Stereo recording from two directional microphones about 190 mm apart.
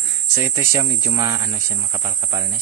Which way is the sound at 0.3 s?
15° right (ahead or behind).